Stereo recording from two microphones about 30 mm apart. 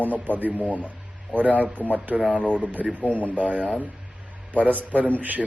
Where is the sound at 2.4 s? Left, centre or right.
Left.